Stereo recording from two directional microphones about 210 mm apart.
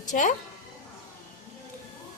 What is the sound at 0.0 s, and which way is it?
Speech, 35° left (ahead or behind).